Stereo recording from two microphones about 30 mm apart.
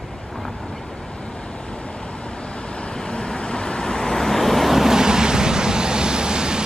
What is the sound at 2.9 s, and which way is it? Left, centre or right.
Vehicle, left.